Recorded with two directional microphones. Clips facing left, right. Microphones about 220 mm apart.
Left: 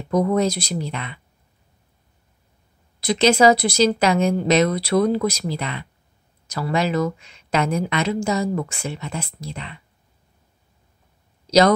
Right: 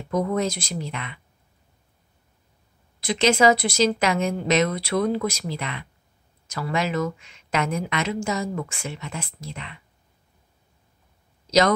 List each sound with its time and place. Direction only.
0.1 s speech: 35° left (ahead or behind)
3.0 s speech: 35° left (ahead or behind)